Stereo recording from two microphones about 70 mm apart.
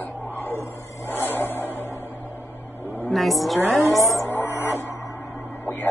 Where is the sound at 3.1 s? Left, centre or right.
Centre.